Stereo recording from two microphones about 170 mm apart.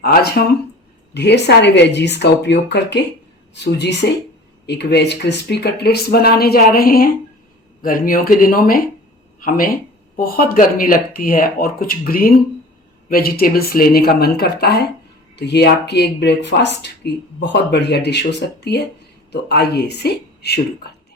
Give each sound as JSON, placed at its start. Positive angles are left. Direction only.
{"t": 0.0, "sound": "speech", "side_deg": 70}
{"t": 1.1, "sound": "a woman's voice", "side_deg": 80}
{"t": 15.4, "sound": "a woman's voice", "side_deg": 85}
{"t": 19.3, "sound": "speech", "side_deg": 70}